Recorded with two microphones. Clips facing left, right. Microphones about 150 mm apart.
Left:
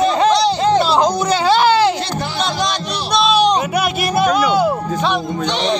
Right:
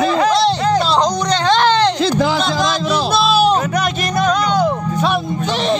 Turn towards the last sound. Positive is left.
turn(degrees=0)  # may be behind; listen again after turning